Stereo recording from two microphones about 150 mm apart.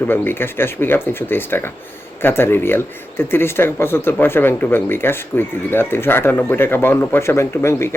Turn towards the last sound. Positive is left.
turn(degrees=15)  # may be behind; listen again after turning